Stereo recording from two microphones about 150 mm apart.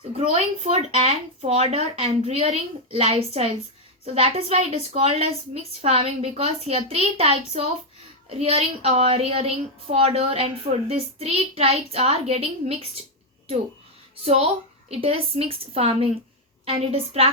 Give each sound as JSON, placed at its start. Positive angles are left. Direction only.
{"t": 0.2, "sound": "a woman's voice", "side_deg": -45}
{"t": 14.8, "sound": "a woman's voice", "side_deg": -40}